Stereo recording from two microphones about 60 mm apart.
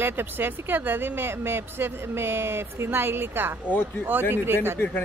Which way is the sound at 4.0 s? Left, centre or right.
Right.